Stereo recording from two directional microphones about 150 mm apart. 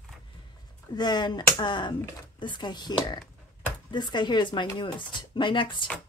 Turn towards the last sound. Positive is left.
turn(degrees=35)  # may be behind; listen again after turning